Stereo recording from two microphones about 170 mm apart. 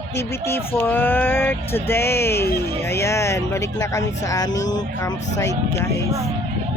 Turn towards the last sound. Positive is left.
turn(degrees=20)  # may be behind; listen again after turning